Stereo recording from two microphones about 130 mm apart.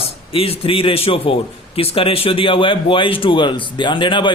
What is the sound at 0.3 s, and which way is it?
A man's voice, 45° left (ahead or behind).